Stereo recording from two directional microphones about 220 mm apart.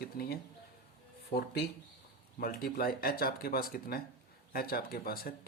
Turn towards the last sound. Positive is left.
turn(degrees=40)  # may be behind; listen again after turning